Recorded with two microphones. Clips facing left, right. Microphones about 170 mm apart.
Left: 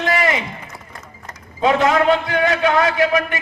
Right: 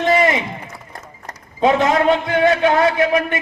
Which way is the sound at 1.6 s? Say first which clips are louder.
Right 1 dB; 25° right (ahead or behind).